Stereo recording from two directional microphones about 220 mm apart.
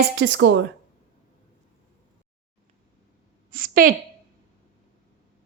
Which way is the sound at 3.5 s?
40° right (ahead or behind).